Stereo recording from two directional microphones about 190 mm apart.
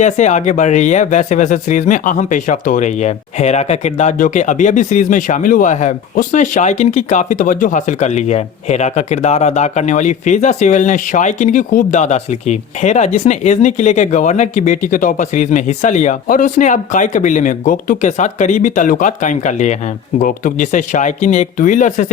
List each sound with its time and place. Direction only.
0.0 s speech: 40° left (ahead or behind)